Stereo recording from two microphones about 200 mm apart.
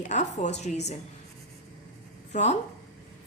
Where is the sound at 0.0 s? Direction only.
35° left (ahead or behind).